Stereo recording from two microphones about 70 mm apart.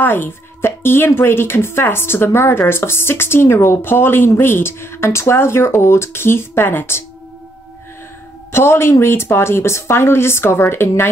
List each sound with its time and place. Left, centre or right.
0.0 s speech: left
8.5 s a woman's voice: left